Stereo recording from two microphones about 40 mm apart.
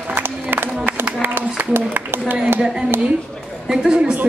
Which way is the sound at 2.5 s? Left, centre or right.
Centre.